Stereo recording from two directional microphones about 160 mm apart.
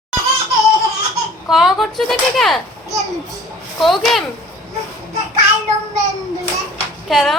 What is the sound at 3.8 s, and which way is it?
Speech, centre (ahead or behind).